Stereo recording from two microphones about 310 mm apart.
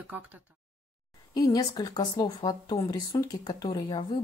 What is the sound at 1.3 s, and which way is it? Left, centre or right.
Speech, centre.